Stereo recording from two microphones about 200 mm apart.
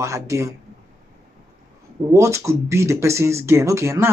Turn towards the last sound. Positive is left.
turn(degrees=-15)  # may be behind; listen again after turning